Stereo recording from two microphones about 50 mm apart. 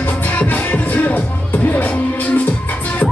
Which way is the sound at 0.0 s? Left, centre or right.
Left.